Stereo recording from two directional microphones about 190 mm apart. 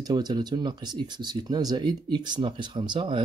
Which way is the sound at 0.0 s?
20° right (ahead or behind).